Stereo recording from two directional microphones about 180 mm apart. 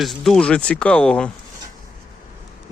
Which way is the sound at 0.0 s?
Centre (ahead or behind).